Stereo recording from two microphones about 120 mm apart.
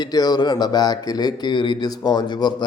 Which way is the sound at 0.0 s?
35° left (ahead or behind).